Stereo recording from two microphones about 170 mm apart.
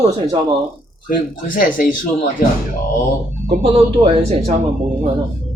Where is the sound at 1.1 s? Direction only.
55° left (ahead or behind).